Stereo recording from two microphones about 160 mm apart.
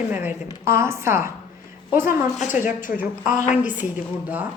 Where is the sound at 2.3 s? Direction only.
55° left (ahead or behind).